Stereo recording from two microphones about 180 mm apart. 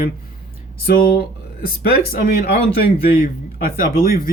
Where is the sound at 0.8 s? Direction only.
55° left (ahead or behind).